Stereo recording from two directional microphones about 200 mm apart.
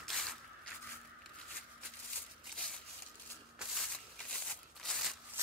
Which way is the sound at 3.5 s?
Centre (ahead or behind).